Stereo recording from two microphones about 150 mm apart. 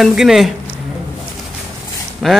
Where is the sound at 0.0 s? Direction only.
5° right (ahead or behind).